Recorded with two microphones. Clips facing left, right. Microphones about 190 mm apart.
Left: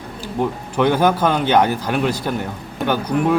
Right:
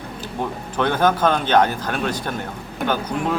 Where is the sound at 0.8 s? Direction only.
10° left (ahead or behind).